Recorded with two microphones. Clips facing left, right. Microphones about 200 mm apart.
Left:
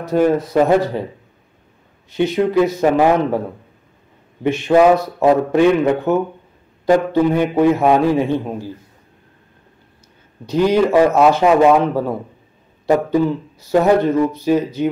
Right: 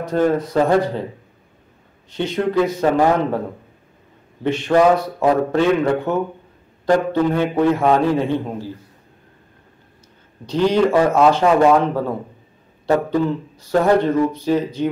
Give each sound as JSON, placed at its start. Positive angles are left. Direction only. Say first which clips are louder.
{"t": 0.0, "sound": "a man's voice", "louder": "left 2 dB", "side_deg": 10}
{"t": 2.1, "sound": "a man's voice", "louder": "left 4 dB", "side_deg": 10}
{"t": 4.4, "sound": "a man's voice", "louder": "left 3 dB", "side_deg": 10}
{"t": 10.4, "sound": "a man's voice", "louder": "left 2 dB", "side_deg": 10}